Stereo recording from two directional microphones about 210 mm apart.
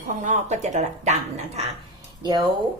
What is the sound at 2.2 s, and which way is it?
Speech, 20° right (ahead or behind).